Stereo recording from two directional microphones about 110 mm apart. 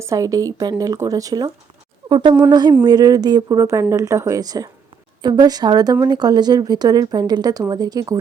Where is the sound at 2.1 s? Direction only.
45° right (ahead or behind).